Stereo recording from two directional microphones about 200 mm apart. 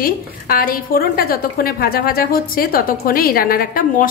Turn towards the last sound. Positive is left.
turn(degrees=45)  # may be behind; listen again after turning